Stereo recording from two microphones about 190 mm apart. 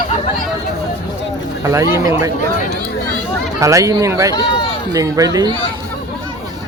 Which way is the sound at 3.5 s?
15° right (ahead or behind).